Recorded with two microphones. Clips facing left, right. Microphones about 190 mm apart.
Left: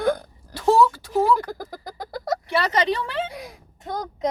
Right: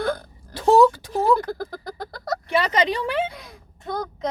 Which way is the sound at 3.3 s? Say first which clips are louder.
Left 5 dB; 10° left (ahead or behind).